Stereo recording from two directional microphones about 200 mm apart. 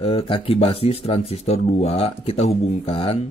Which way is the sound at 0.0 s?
30° left (ahead or behind).